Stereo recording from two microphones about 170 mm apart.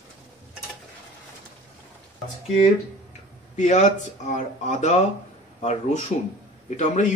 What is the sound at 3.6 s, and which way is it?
Speech, 45° left (ahead or behind).